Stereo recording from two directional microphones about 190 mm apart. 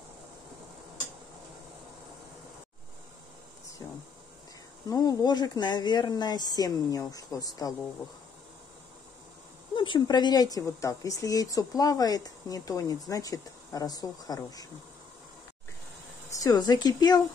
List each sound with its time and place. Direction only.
3.8 s speech: 15° left (ahead or behind)
9.8 s speech: 25° left (ahead or behind)
16.3 s a woman's voice: 20° left (ahead or behind)